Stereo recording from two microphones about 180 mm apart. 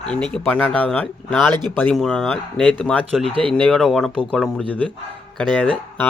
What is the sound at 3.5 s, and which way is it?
Speech, 5° left (ahead or behind).